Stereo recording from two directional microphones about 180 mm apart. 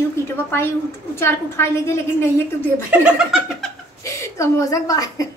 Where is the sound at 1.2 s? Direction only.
15° left (ahead or behind).